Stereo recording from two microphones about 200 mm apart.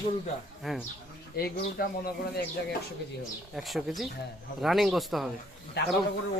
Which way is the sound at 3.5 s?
Centre (ahead or behind).